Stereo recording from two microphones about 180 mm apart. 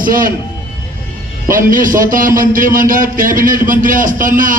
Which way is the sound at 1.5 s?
50° right (ahead or behind).